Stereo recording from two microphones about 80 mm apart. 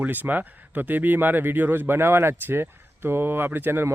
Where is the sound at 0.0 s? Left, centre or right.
Right.